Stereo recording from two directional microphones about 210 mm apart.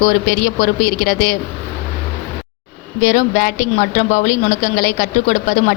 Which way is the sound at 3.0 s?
35° left (ahead or behind).